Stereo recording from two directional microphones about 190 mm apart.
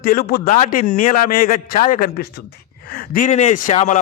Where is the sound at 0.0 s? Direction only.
50° left (ahead or behind).